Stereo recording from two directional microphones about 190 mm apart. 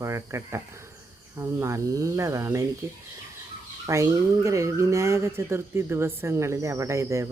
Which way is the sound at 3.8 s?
15° right (ahead or behind).